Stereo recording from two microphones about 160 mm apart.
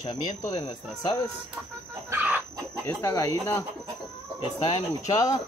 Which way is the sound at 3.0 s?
20° left (ahead or behind).